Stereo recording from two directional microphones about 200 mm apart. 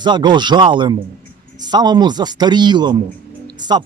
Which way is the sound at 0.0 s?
20° right (ahead or behind).